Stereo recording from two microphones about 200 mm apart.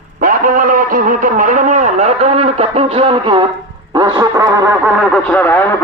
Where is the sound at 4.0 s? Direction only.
20° right (ahead or behind).